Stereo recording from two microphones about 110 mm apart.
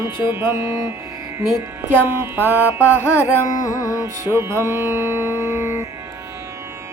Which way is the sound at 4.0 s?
25° right (ahead or behind).